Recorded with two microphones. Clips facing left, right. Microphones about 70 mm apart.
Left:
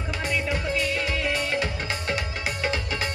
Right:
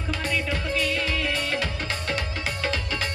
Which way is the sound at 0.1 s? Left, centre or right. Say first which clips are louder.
Even; centre.